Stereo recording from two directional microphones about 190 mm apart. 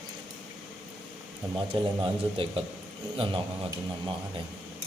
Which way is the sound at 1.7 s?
30° right (ahead or behind).